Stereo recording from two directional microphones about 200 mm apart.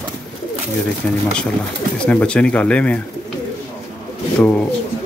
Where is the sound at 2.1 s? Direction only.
5° left (ahead or behind).